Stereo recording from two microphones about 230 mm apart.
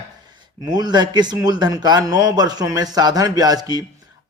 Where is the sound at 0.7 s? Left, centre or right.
Centre.